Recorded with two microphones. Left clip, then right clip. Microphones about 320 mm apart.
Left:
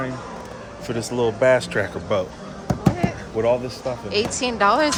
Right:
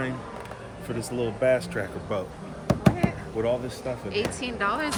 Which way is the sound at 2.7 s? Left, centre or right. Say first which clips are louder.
Left 1 dB; centre.